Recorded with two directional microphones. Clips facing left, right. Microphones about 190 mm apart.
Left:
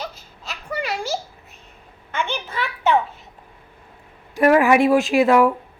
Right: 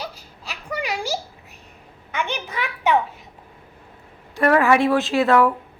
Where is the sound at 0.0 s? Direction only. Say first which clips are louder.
Left 1 dB; 10° right (ahead or behind).